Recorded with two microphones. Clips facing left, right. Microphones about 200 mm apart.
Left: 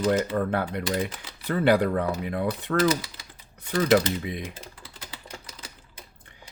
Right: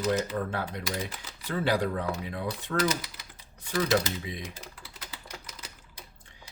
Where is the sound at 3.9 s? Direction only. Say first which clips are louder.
Left 6 dB; 60° left (ahead or behind).